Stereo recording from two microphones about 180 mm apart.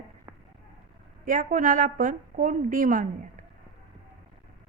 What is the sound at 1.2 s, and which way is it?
A woman's voice, 45° right (ahead or behind).